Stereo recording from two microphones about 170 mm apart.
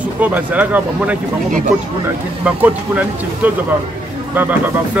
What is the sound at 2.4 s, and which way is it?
Speech, 10° right (ahead or behind).